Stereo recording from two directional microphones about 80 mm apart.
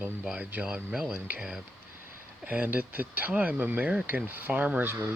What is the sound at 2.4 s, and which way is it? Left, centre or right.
Speech, centre.